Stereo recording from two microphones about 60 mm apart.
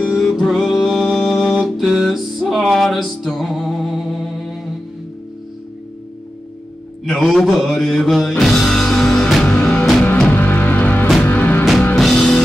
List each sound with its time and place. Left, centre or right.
0.0 s music: centre
7.1 s mantra: centre
8.2 s music: centre
9.4 s music: centre
10.3 s music: left
11.9 s music: centre